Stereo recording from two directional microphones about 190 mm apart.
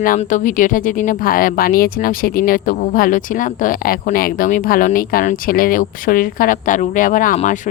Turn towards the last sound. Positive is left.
turn(degrees=40)  # may be behind; listen again after turning